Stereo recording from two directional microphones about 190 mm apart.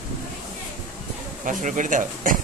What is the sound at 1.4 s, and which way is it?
Speech, 45° right (ahead or behind).